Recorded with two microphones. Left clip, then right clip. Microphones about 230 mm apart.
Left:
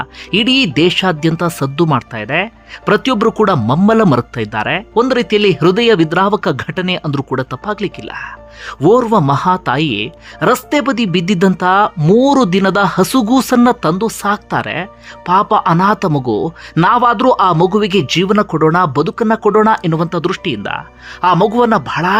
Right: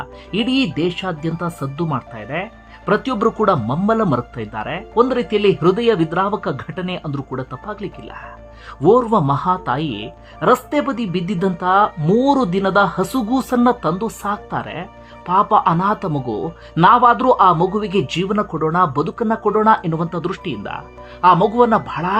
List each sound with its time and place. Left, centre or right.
0.0 s speech: centre